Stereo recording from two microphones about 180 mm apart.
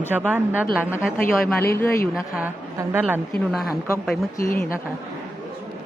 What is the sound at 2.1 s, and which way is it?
A woman's voice, 5° right (ahead or behind).